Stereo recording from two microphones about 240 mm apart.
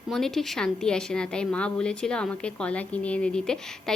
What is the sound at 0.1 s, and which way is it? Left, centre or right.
A woman's voice, centre.